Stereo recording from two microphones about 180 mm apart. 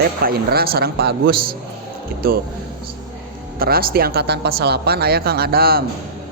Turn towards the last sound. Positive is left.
turn(degrees=-60)  # may be behind; listen again after turning